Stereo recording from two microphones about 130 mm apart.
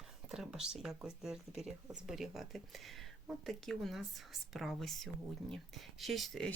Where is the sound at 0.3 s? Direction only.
5° right (ahead or behind).